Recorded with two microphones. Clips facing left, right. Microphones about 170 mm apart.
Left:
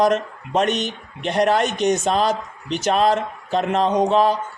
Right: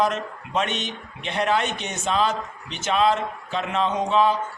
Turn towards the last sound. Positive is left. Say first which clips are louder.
# left 4 dB
turn(degrees=40)  # may be behind; listen again after turning